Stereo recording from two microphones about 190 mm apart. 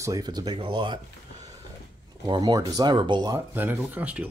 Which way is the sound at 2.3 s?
25° right (ahead or behind).